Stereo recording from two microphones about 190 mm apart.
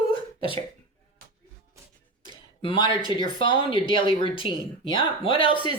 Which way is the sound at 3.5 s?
25° left (ahead or behind).